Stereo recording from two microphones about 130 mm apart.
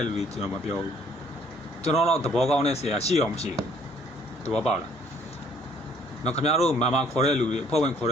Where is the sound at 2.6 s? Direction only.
55° left (ahead or behind).